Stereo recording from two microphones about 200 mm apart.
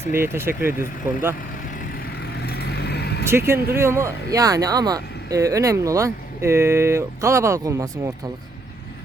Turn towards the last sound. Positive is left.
turn(degrees=-15)  # may be behind; listen again after turning